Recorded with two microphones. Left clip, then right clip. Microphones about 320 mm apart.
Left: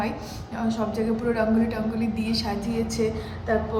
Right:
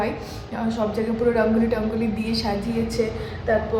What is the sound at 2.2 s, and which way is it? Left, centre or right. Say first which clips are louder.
Speech: right 1 dB; centre.